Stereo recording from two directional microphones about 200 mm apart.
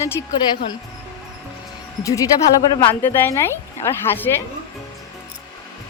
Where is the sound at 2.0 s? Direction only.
15° left (ahead or behind).